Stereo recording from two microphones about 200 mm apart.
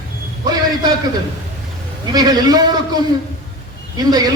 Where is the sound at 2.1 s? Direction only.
20° right (ahead or behind).